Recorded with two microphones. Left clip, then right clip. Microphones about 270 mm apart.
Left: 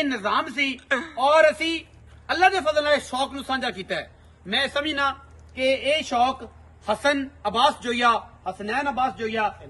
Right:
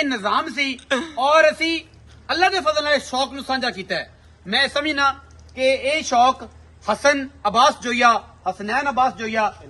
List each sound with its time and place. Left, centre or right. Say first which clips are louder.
0.0 s a man's voice: right 3 dB; centre